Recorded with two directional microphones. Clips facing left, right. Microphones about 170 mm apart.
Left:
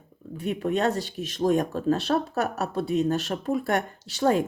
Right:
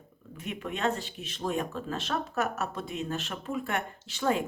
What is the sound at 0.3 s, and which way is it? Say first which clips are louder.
Speech: left 10 dB; 35° left (ahead or behind).